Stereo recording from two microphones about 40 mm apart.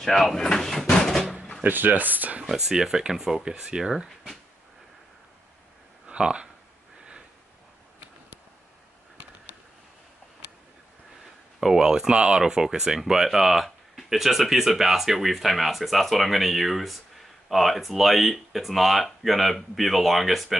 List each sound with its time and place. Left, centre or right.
0.0 s speech: centre
0.5 s a sound: centre
0.8 s door: centre
1.6 s speech: right
2.4 s speech: centre
6.0 s speech: right
11.6 s speech: centre